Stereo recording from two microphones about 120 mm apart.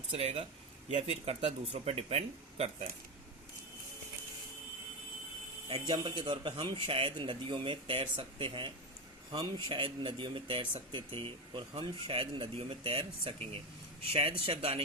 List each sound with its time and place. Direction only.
0.1 s speech: 60° right (ahead or behind)
5.6 s speech: 45° right (ahead or behind)